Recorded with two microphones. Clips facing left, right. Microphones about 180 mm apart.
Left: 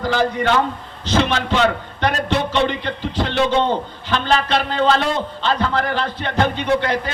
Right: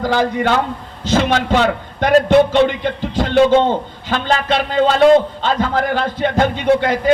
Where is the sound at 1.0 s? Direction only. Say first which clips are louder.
Right 3 dB; 50° right (ahead or behind).